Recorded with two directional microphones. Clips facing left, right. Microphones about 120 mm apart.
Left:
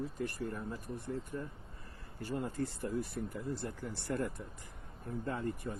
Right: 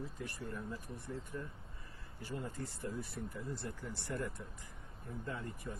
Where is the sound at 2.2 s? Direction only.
65° left (ahead or behind).